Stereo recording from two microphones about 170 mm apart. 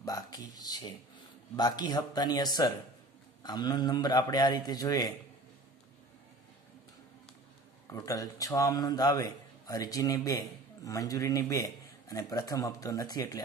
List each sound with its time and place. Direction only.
0.0 s a sound: 20° left (ahead or behind)
1.6 s a man's voice: 25° left (ahead or behind)
7.9 s a man's voice: 20° left (ahead or behind)